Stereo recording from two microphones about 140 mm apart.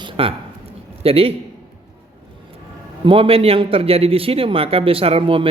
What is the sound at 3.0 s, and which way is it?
A man's voice, 40° right (ahead or behind).